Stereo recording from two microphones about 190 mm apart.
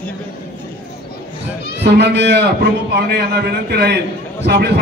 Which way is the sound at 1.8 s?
65° right (ahead or behind).